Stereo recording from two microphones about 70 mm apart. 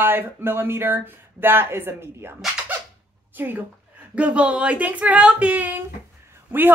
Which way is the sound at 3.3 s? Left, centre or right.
Right.